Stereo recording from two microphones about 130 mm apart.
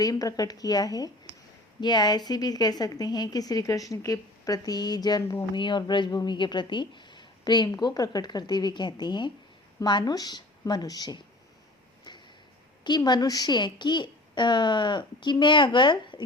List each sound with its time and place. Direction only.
0.0 s a woman's voice: 30° left (ahead or behind)
12.1 s a sound: 35° left (ahead or behind)
12.8 s a woman's voice: 35° left (ahead or behind)